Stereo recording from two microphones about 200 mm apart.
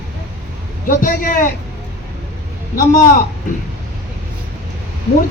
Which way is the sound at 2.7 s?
45° left (ahead or behind).